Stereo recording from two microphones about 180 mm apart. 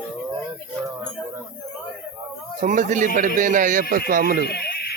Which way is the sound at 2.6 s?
45° right (ahead or behind).